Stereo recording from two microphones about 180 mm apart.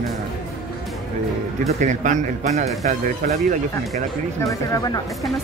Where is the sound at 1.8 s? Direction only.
45° right (ahead or behind).